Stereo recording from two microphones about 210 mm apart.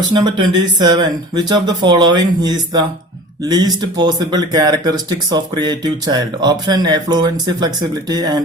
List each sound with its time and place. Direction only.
0.1 s speech: 20° right (ahead or behind)